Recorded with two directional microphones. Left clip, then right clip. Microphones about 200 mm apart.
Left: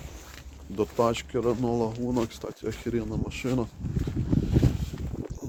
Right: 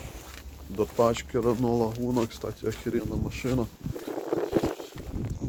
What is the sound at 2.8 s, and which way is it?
Speech, 10° left (ahead or behind).